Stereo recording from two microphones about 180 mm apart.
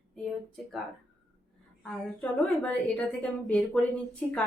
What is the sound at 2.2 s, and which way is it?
A woman's voice, 5° left (ahead or behind).